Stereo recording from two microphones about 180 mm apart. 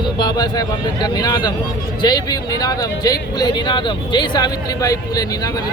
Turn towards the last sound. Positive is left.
turn(degrees=20)  # may be behind; listen again after turning